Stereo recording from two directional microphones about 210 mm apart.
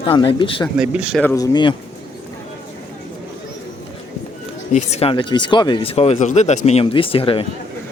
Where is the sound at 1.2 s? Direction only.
15° left (ahead or behind).